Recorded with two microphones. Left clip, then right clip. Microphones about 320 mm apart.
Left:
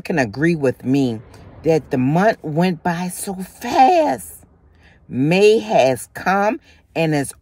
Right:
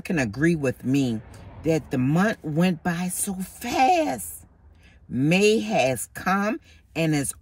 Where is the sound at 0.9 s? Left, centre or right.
Centre.